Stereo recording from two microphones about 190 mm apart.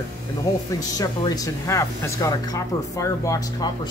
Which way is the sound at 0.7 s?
20° left (ahead or behind).